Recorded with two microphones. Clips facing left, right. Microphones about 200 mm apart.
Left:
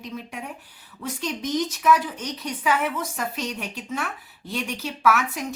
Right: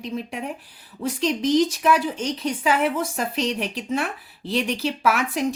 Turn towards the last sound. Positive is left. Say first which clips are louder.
# even
turn(degrees=-30)  # may be behind; listen again after turning